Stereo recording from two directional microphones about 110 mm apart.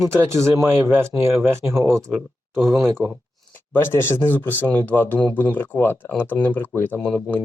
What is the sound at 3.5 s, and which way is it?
A man's voice, 20° left (ahead or behind).